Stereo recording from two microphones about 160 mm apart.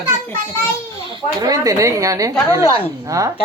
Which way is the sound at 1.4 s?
20° right (ahead or behind).